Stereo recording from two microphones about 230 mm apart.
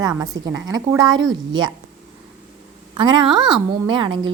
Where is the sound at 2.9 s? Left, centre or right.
Right.